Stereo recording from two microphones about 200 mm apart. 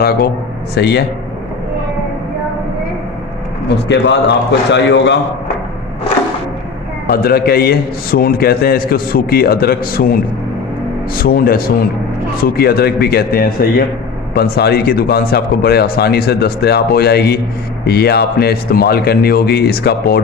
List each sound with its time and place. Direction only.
0.0 s a man's voice: 50° left (ahead or behind)
3.8 s a man's voice: 60° left (ahead or behind)
7.1 s a man's voice: 50° left (ahead or behind)